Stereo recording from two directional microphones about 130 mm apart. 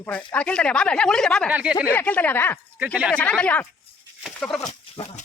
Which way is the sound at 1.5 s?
10° right (ahead or behind).